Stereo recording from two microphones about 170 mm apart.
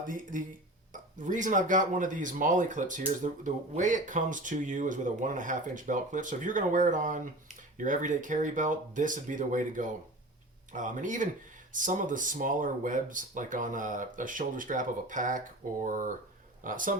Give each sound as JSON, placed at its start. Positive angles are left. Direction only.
{"t": 0.0, "sound": "speech", "side_deg": -50}